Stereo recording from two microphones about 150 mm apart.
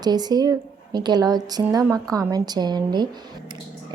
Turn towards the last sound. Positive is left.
turn(degrees=-30)  # may be behind; listen again after turning